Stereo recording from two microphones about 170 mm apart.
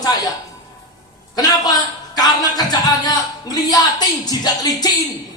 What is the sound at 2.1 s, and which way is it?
Speech, 25° left (ahead or behind).